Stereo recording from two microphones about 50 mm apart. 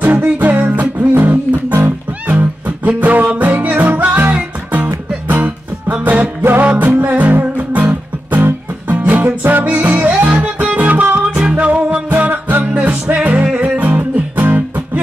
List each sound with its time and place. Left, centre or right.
0.0 s music: right
5.4 s music: right
12.7 s music: right